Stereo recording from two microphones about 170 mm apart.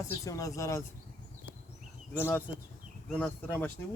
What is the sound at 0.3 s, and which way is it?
Speech, 20° left (ahead or behind).